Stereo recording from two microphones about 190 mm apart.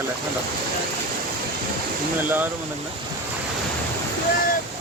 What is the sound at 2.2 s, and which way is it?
Speech, 10° right (ahead or behind).